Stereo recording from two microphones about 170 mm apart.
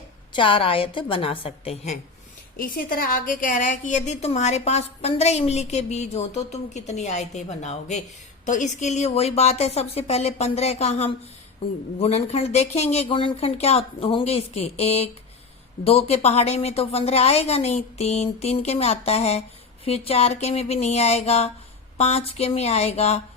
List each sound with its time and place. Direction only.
0.3 s a woman's voice: 30° left (ahead or behind)
2.6 s a woman's voice: 55° left (ahead or behind); by 23.2 s 40° left (ahead or behind)